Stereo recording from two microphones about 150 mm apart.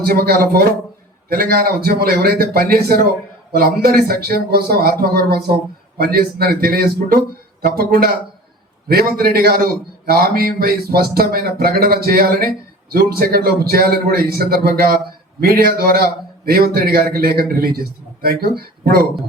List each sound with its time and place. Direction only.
0.0 s a man's voice: 90° right